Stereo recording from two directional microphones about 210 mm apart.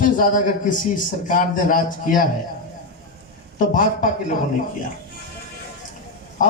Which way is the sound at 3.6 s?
40° left (ahead or behind).